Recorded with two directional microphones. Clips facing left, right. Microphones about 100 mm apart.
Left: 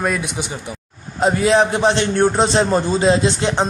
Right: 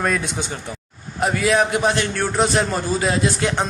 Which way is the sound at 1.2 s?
25° left (ahead or behind).